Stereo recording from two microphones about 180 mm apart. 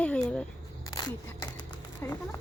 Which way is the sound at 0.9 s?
20° left (ahead or behind).